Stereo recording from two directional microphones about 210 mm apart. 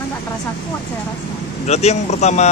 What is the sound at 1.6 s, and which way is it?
Speech, 30° left (ahead or behind).